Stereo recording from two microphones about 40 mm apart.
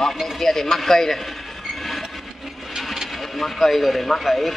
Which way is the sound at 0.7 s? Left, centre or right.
Centre.